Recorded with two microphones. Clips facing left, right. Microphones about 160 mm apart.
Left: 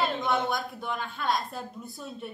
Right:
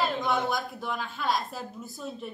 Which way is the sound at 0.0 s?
Centre (ahead or behind).